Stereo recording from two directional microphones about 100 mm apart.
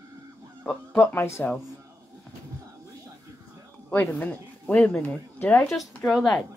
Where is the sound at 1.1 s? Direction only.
25° left (ahead or behind).